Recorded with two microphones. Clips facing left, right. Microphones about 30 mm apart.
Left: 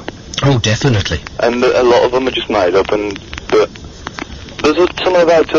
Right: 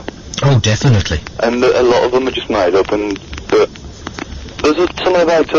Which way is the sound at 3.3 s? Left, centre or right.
Centre.